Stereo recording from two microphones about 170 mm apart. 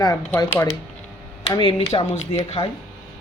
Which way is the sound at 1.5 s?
30° left (ahead or behind).